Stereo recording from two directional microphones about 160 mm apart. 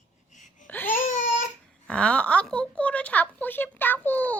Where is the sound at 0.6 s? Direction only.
10° left (ahead or behind).